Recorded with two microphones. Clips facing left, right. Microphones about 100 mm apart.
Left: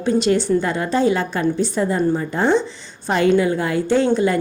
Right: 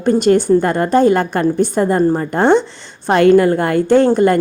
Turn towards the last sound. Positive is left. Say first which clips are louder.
# right 6 dB
turn(degrees=-55)  # may be behind; listen again after turning